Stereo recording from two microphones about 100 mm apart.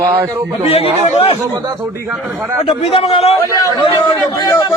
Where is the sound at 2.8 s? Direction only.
90° left.